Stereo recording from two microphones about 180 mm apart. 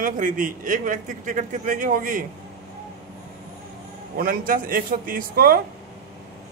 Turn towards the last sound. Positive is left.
turn(degrees=-55)  # may be behind; listen again after turning